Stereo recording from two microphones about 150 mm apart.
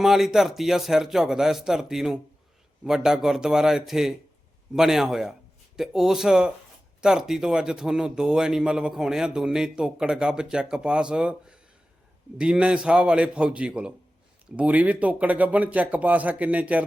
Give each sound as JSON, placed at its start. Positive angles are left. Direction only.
{"t": 0.0, "sound": "speech", "side_deg": 0}